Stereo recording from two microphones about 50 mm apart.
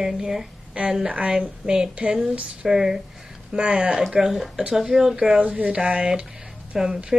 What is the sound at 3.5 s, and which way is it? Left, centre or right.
A woman's voice, centre.